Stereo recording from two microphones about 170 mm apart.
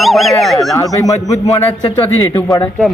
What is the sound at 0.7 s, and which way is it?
Speech, 20° left (ahead or behind).